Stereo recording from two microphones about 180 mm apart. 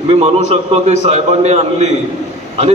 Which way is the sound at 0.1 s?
35° right (ahead or behind).